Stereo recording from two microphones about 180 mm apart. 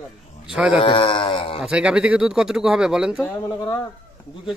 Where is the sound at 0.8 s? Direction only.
30° left (ahead or behind).